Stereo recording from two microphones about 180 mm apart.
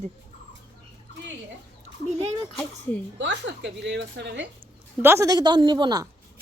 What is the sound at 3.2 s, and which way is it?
A woman's voice, 85° right.